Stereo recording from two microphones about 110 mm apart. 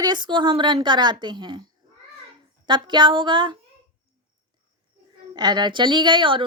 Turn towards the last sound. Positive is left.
turn(degrees=-45)  # may be behind; listen again after turning